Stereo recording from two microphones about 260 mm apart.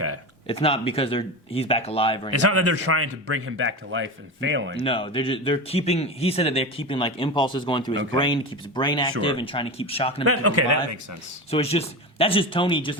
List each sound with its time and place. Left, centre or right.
0.4 s speech: left
2.3 s speech: right
4.8 s speech: left
10.2 s a man's voice: right
11.5 s speech: left